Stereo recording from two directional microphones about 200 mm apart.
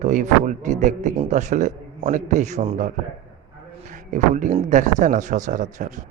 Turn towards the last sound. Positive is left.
turn(degrees=-40)  # may be behind; listen again after turning